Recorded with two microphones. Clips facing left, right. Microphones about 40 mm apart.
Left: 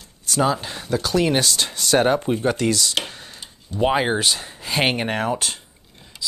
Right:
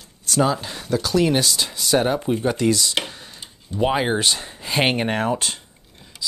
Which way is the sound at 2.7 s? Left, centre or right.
Centre.